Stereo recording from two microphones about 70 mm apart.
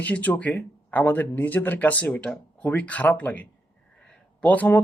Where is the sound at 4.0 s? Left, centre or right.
Left.